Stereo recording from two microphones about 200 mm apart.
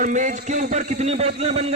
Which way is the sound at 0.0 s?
40° right (ahead or behind).